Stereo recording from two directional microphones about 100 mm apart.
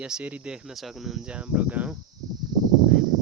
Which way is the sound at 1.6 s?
15° right (ahead or behind).